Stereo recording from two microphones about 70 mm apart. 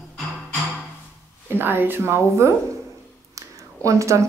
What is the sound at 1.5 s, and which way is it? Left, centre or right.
Speech, right.